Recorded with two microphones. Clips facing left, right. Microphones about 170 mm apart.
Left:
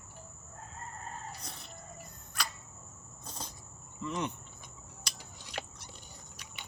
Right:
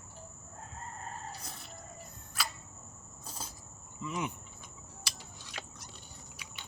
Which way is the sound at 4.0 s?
5° right (ahead or behind).